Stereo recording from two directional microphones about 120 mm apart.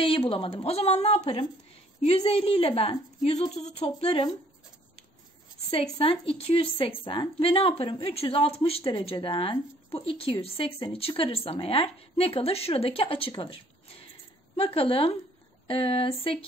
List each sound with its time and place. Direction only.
0.0 s speech: 50° left (ahead or behind)
3.5 s speech: 65° left (ahead or behind)
5.7 s a woman's voice: 55° left (ahead or behind)